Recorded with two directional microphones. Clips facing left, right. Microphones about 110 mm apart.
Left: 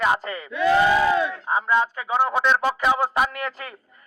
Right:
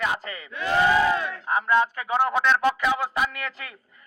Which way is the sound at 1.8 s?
20° left (ahead or behind).